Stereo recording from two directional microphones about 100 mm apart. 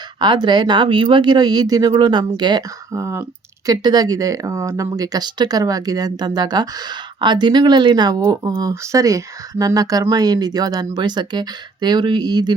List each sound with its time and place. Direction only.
0.2 s speech: 50° right (ahead or behind)
2.9 s speech: 30° right (ahead or behind)
3.7 s speech: 40° right (ahead or behind)